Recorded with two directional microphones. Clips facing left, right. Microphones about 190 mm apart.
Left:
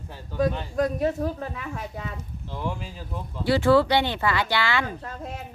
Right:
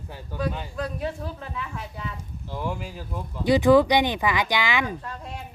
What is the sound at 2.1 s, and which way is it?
Speech, 10° right (ahead or behind).